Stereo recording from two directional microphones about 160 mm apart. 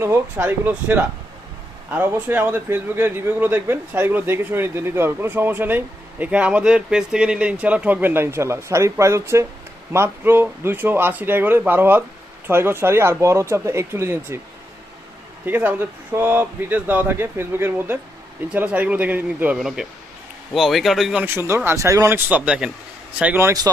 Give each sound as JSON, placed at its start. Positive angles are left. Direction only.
{"t": 0.0, "sound": "speech", "side_deg": -15}
{"t": 15.4, "sound": "speech", "side_deg": -10}